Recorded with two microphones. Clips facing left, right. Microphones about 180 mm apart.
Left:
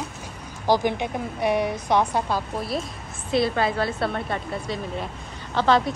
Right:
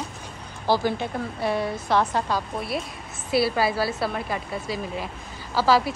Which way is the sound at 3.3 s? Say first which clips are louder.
Even; 5° right (ahead or behind).